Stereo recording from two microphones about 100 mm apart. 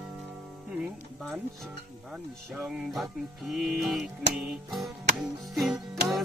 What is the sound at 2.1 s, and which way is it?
Speech, 5° right (ahead or behind).